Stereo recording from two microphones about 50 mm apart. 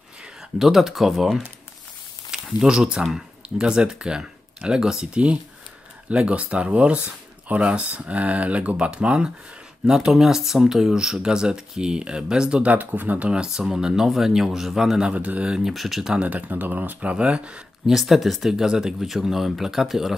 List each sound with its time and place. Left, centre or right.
0.6 s speech: centre
12.7 s speech: right
13.3 s speech: centre
15.1 s speech: right
15.7 s speech: centre
16.2 s speech: right
17.8 s speech: centre